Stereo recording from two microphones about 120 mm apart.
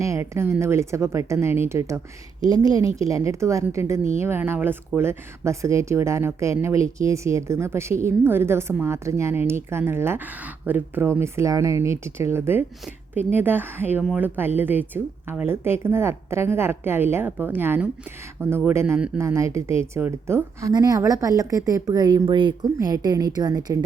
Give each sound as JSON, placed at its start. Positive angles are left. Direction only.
{"t": 0.0, "sound": "a woman's voice", "side_deg": -25}
{"t": 18.9, "sound": "a woman's voice", "side_deg": -10}
{"t": 19.2, "sound": "a woman's voice", "side_deg": -25}